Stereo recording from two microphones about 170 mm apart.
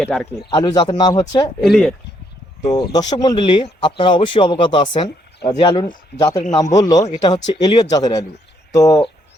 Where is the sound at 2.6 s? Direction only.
25° left (ahead or behind).